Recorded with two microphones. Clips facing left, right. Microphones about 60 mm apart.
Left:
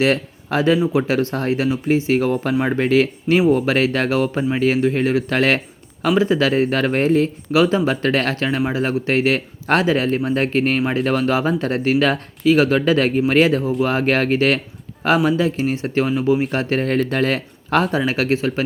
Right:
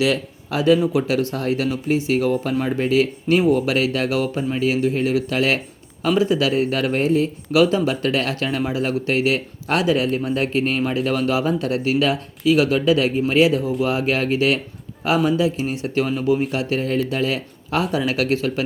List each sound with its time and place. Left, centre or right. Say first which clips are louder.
0.0 s speech: left 2 dB; left
16.5 s speech: left 2 dB; left
17.9 s speech: left 1 dB; left